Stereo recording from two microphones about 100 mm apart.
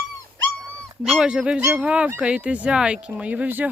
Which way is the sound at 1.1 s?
10° right (ahead or behind).